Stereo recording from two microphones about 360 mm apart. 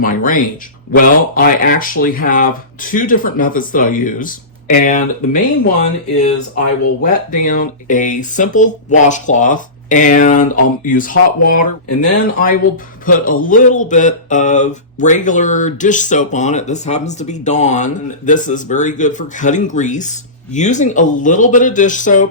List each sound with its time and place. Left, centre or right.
0.0 s speech: left
7.0 s speech: left